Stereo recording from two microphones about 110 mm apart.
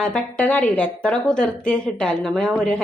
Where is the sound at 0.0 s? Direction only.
10° left (ahead or behind).